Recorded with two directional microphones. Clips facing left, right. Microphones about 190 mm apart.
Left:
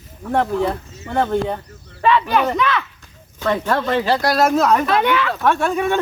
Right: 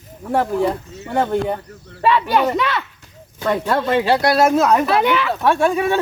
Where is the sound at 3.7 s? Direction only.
10° right (ahead or behind).